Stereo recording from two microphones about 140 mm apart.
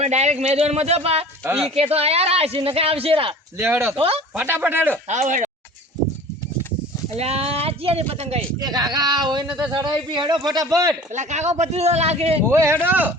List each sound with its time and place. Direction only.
0.0 s a man's voice: 50° right (ahead or behind)
3.6 s a man's voice: 15° right (ahead or behind)
3.9 s a man's voice: 45° right (ahead or behind)
4.4 s a man's voice: 15° right (ahead or behind)
5.0 s speech: 55° right (ahead or behind)
7.2 s a man's voice: 45° right (ahead or behind)
8.5 s a man's voice: 30° right (ahead or behind)
11.1 s a man's voice: 60° right (ahead or behind)
12.5 s a man's voice: 20° right (ahead or behind)